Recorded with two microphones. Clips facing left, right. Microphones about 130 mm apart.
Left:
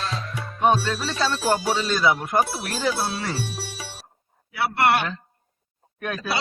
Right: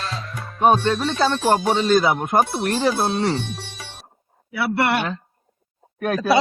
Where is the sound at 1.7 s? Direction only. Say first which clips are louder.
Right 7 dB; 25° right (ahead or behind).